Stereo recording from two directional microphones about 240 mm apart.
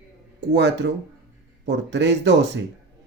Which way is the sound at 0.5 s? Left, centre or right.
Right.